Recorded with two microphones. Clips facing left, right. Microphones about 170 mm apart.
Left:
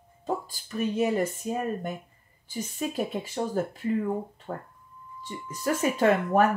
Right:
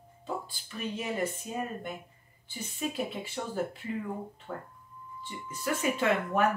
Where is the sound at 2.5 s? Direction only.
40° left (ahead or behind).